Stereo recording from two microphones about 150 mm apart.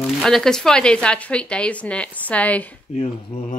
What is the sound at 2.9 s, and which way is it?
Speech, 45° left (ahead or behind).